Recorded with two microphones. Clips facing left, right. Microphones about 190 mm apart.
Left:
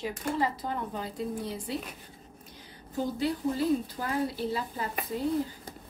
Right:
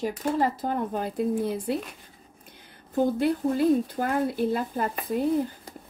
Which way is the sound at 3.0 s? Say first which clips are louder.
Right 6 dB; 55° right (ahead or behind).